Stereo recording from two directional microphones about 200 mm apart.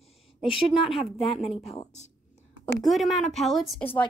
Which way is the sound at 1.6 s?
35° left (ahead or behind).